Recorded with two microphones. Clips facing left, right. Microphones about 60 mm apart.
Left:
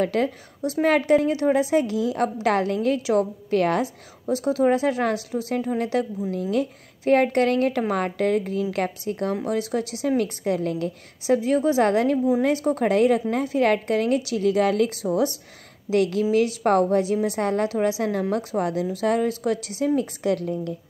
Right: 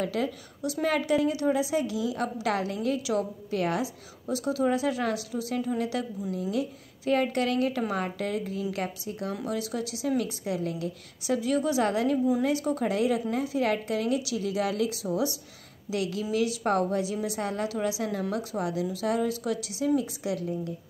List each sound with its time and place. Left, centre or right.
0.0 s a woman's voice: left
0.6 s a woman's voice: left
4.3 s a woman's voice: left
6.5 s a woman's voice: left
11.2 s a woman's voice: left